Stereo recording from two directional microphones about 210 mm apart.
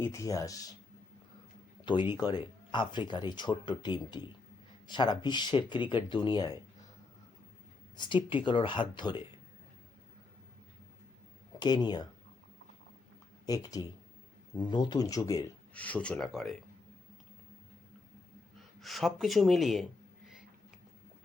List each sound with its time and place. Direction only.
0.0 s speech: 15° left (ahead or behind)
1.8 s speech: 20° left (ahead or behind)
7.9 s speech: 20° left (ahead or behind)
11.6 s speech: 20° left (ahead or behind)
13.5 s speech: 15° left (ahead or behind); by 16.6 s centre (ahead or behind)
18.8 s speech: centre (ahead or behind)